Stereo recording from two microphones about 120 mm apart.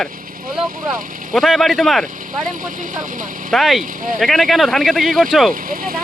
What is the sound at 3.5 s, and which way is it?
Speech, centre (ahead or behind).